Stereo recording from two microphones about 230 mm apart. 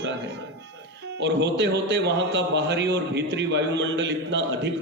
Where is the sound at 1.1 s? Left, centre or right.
Right.